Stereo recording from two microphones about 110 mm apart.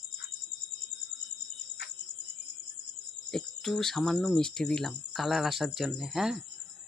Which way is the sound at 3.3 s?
5° left (ahead or behind).